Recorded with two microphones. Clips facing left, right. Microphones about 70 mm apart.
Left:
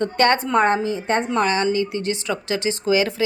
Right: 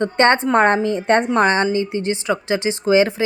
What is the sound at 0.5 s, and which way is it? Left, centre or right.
Speech, right.